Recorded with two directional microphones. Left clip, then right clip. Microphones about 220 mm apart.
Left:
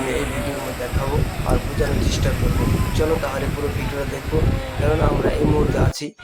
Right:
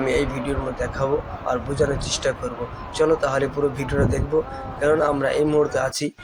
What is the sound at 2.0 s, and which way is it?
Speech, 15° right (ahead or behind).